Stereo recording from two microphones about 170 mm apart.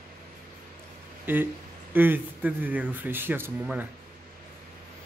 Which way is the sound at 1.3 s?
10° right (ahead or behind).